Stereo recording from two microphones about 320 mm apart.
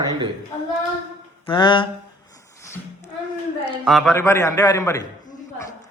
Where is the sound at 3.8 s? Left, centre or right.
Centre.